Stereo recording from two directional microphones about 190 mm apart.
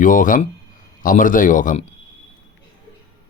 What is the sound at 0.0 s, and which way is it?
Speech, 45° left (ahead or behind).